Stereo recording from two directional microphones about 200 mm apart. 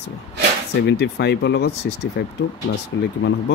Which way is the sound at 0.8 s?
60° left (ahead or behind).